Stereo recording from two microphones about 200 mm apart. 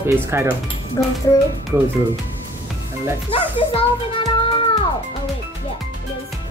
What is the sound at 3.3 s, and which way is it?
Speech, 25° left (ahead or behind).